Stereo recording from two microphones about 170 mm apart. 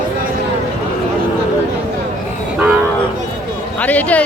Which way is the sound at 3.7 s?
10° left (ahead or behind).